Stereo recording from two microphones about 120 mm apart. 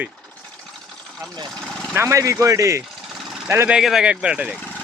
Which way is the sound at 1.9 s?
25° right (ahead or behind).